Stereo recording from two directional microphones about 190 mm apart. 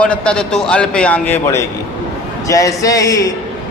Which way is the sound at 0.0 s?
5° left (ahead or behind).